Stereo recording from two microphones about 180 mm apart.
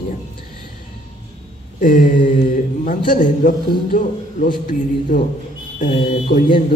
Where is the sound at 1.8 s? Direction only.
50° left (ahead or behind).